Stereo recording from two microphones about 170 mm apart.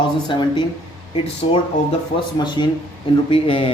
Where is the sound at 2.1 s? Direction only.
25° left (ahead or behind).